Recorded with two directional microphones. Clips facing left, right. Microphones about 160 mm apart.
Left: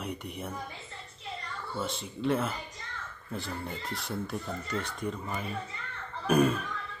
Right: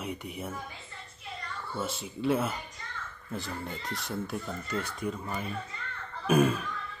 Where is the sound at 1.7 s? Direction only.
5° right (ahead or behind).